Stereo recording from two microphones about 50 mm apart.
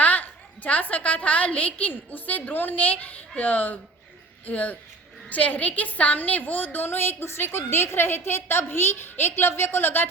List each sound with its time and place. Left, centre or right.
0.0 s a woman's voice: left
6.8 s a woman's voice: left